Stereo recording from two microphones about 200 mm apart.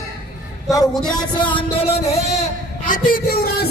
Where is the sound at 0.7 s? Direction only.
20° left (ahead or behind).